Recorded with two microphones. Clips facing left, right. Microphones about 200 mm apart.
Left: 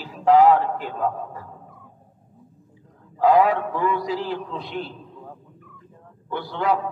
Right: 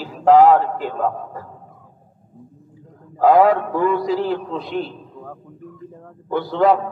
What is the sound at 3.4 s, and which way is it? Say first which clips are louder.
A man's voice: right 5 dB; 40° right (ahead or behind).